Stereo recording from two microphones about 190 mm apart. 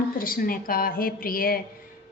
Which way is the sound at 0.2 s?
50° left (ahead or behind).